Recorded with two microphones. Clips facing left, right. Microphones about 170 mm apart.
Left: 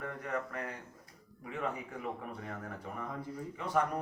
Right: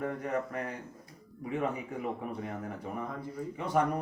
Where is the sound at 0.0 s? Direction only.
25° right (ahead or behind).